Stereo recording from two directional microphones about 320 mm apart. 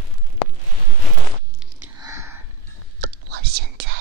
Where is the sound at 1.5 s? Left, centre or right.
Centre.